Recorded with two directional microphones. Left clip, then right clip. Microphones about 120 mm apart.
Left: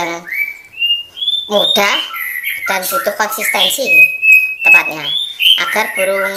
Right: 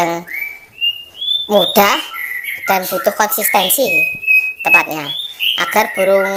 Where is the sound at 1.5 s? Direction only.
45° right (ahead or behind).